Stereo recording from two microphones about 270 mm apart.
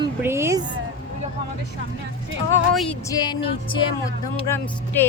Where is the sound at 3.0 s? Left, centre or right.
Centre.